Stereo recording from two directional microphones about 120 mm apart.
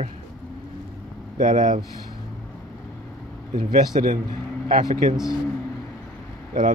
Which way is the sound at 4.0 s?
70° right (ahead or behind).